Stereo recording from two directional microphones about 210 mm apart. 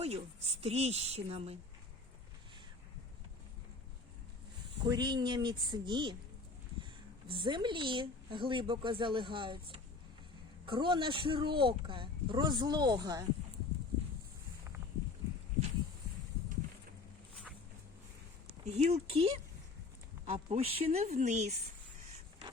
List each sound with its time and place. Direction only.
0.0 s speech: 30° right (ahead or behind)
4.9 s speech: 20° right (ahead or behind)
7.3 s speech: 20° right (ahead or behind)
18.6 s a woman's voice: 30° right (ahead or behind)